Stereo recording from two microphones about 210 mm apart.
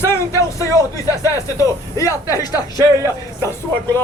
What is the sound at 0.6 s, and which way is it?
Speech, 15° left (ahead or behind).